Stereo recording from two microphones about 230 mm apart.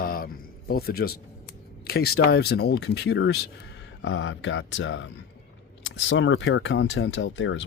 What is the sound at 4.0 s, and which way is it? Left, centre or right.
Speech, left.